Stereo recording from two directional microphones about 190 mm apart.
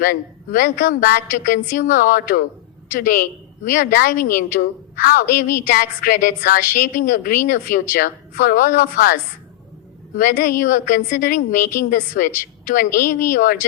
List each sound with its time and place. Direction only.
0.0 s a woman's voice: 45° left (ahead or behind)
10.2 s a woman's voice: 45° left (ahead or behind)